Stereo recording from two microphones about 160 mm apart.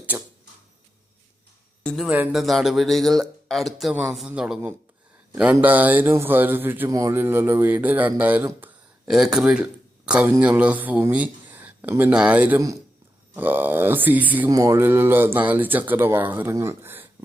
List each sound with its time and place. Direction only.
1.8 s speech: 10° left (ahead or behind)
2.0 s speech: 10° right (ahead or behind)